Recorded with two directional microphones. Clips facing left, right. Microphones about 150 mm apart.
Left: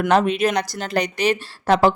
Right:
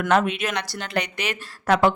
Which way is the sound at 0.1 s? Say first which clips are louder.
Left 3 dB; 35° left (ahead or behind).